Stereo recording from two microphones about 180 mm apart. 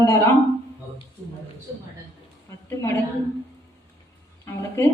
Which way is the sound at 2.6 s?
15° left (ahead or behind).